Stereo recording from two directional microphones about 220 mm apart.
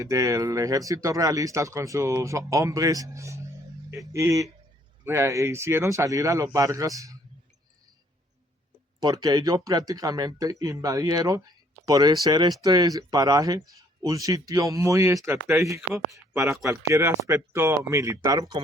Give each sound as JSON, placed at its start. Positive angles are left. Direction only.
{"t": 0.0, "sound": "speech", "side_deg": -15}
{"t": 9.0, "sound": "speech", "side_deg": -15}